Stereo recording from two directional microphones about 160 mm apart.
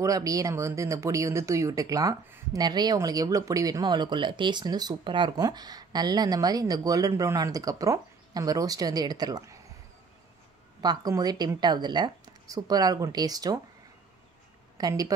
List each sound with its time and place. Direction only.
0.0 s speech: 20° right (ahead or behind)
10.8 s speech: 25° right (ahead or behind)
14.8 s speech: 20° right (ahead or behind)